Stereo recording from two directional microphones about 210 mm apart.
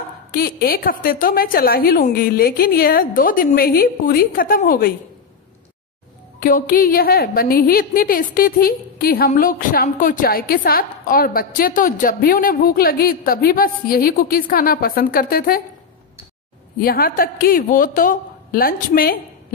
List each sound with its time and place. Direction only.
0.3 s a woman's voice: 45° left (ahead or behind)
6.4 s a woman's voice: 40° left (ahead or behind)
16.8 s a woman's voice: 45° left (ahead or behind)